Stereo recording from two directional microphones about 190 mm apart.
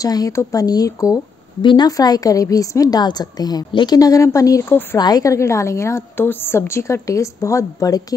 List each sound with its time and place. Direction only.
0.0 s speech: 20° left (ahead or behind)